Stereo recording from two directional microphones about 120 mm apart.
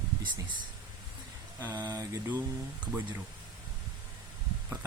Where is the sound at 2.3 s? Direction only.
15° right (ahead or behind).